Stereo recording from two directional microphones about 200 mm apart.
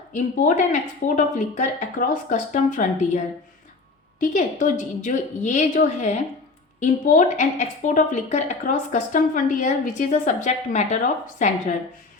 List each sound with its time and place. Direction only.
0.3 s a woman's voice: 40° left (ahead or behind)
4.2 s a woman's voice: 40° left (ahead or behind)